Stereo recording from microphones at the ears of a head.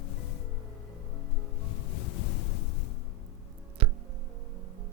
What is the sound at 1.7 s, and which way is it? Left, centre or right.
Music, left.